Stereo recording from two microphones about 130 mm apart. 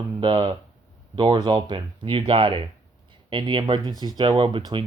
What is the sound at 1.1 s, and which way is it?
Speech, 35° right (ahead or behind).